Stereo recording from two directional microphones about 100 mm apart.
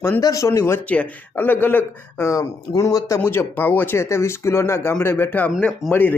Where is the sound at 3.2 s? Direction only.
20° left (ahead or behind).